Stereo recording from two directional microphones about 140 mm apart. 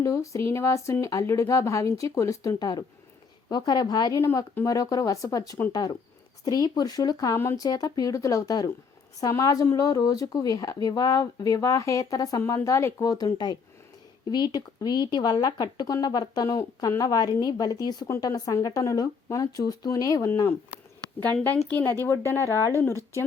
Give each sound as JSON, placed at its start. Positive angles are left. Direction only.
{"t": 0.0, "sound": "speech", "side_deg": 20}
{"t": 21.3, "sound": "speech", "side_deg": 10}